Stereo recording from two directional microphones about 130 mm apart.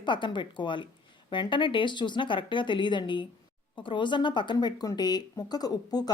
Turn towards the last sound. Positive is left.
turn(degrees=30)  # may be behind; listen again after turning